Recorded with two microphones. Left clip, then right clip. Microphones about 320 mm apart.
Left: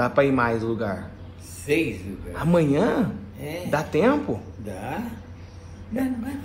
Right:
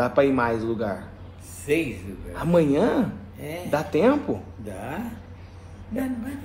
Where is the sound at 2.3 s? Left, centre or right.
Left.